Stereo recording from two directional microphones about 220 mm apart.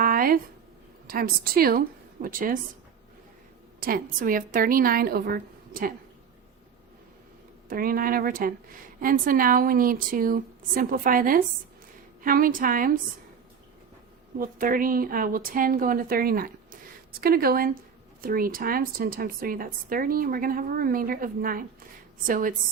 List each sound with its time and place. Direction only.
0.0 s a sound: 40° right (ahead or behind)
1.0 s a woman's voice: 40° right (ahead or behind)
3.8 s a woman's voice: 40° right (ahead or behind)
7.7 s a woman's voice: 40° right (ahead or behind)
14.3 s a woman's voice: 40° right (ahead or behind)